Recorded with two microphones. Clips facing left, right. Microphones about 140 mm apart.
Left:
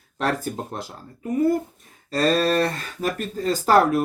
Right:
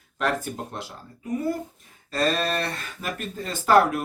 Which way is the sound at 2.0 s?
40° left (ahead or behind).